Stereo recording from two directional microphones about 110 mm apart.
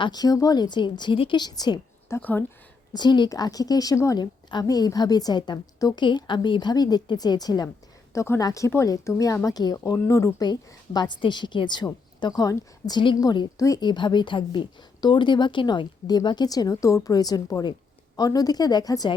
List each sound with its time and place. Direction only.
0.0 s a woman's voice: 40° left (ahead or behind)
1.4 s a woman's voice: 40° left (ahead or behind)
2.0 s speech: 20° left (ahead or behind)
2.9 s a woman's voice: 40° left (ahead or behind)
10.4 s a woman's voice: 40° left (ahead or behind)